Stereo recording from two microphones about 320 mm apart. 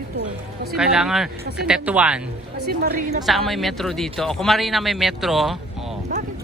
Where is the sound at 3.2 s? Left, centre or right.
Centre.